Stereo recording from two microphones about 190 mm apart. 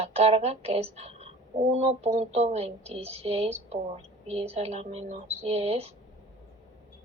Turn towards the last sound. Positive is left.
turn(degrees=-35)  # may be behind; listen again after turning